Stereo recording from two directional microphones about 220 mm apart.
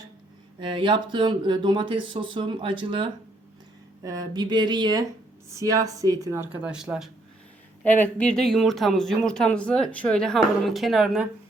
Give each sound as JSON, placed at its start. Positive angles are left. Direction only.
{"t": 0.6, "sound": "speech", "side_deg": -20}
{"t": 7.9, "sound": "speech", "side_deg": 10}